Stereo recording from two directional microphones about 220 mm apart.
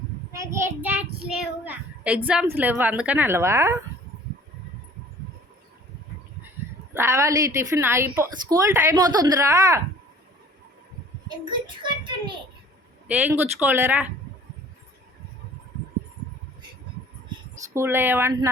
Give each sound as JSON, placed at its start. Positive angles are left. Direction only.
{"t": 0.3, "sound": "child singing", "side_deg": -10}
{"t": 1.6, "sound": "a woman's voice", "side_deg": -5}
{"t": 6.9, "sound": "a woman's voice", "side_deg": -10}
{"t": 11.3, "sound": "a child's voice", "side_deg": -20}
{"t": 13.1, "sound": "a woman's voice", "side_deg": -5}
{"t": 17.7, "sound": "a woman's voice", "side_deg": -10}